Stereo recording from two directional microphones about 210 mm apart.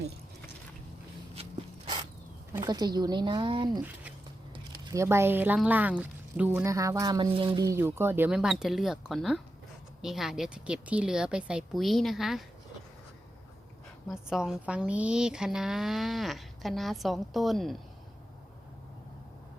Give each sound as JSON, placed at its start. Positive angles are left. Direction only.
{"t": 1.4, "sound": "a sound", "side_deg": -30}
{"t": 2.6, "sound": "a woman's voice", "side_deg": -20}
{"t": 14.1, "sound": "a woman's voice", "side_deg": 0}